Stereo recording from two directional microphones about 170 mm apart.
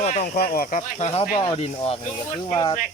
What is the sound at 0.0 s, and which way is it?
Speech, 45° left (ahead or behind).